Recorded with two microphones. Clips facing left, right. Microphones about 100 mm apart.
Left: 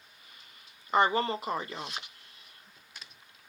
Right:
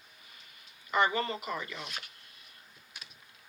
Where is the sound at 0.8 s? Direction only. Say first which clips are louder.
Left 3 dB; 30° left (ahead or behind).